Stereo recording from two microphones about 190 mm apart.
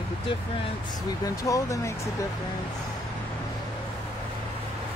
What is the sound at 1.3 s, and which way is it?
Speech, 15° left (ahead or behind).